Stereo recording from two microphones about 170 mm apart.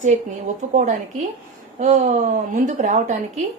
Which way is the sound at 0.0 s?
45° right (ahead or behind).